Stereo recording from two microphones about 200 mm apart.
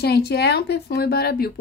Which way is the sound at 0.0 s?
55° left (ahead or behind).